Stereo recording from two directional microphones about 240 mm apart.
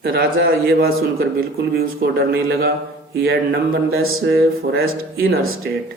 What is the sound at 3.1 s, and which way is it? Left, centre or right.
Mantra, right.